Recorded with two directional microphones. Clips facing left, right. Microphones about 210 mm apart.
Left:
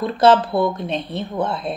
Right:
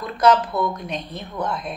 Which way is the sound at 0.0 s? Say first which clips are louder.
Left 3 dB; 30° left (ahead or behind).